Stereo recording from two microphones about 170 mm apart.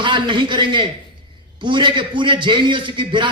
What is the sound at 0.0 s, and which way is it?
A man's voice, 30° right (ahead or behind).